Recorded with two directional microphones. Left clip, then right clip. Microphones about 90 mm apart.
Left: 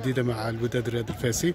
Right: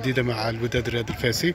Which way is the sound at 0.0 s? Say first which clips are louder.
Right 3 dB; 35° left (ahead or behind).